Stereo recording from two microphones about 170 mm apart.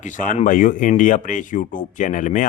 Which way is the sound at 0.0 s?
50° left (ahead or behind).